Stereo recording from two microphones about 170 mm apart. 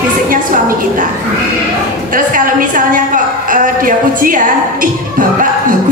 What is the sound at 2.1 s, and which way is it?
A woman's voice, 55° right (ahead or behind).